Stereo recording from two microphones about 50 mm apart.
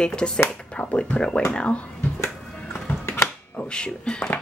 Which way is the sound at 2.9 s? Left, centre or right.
Left.